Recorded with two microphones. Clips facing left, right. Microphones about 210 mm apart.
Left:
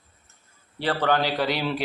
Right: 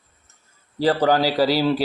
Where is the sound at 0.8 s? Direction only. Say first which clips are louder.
Right 5 dB; 35° right (ahead or behind).